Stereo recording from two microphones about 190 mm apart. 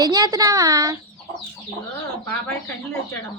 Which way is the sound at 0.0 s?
20° right (ahead or behind).